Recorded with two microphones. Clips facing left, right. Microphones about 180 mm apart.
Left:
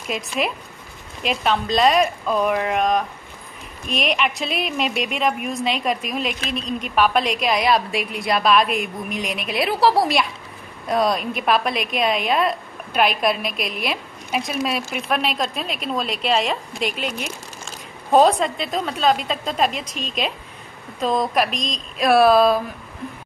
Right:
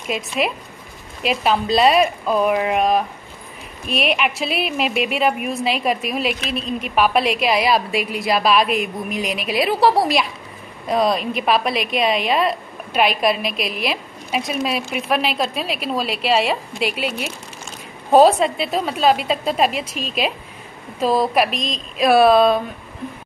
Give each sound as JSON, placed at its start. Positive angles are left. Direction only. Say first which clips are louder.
{"t": 0.1, "sound": "a woman's voice", "louder": "right 1 dB", "side_deg": 0}